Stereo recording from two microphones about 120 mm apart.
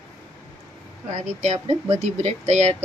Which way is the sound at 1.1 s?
75° right (ahead or behind).